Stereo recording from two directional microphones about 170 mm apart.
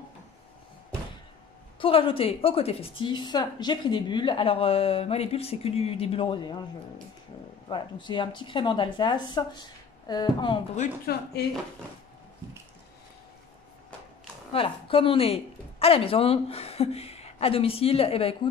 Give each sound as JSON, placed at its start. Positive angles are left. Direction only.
{"t": 1.8, "sound": "a woman's voice", "side_deg": 35}
{"t": 7.6, "sound": "speech", "side_deg": 25}
{"t": 11.1, "sound": "speech", "side_deg": 65}
{"t": 14.5, "sound": "a woman's voice", "side_deg": 30}